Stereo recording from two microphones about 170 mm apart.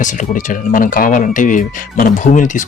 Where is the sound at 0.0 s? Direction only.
50° left (ahead or behind).